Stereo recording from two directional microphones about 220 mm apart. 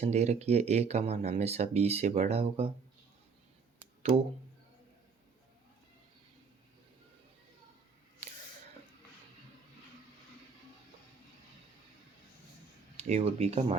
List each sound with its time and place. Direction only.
0.0 s speech: 30° right (ahead or behind)
13.0 s speech: 25° right (ahead or behind)